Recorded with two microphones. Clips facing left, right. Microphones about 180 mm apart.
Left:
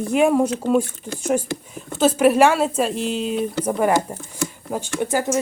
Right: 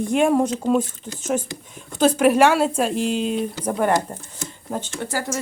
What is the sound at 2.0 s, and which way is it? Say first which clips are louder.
Speech: left 1 dB; 5° left (ahead or behind).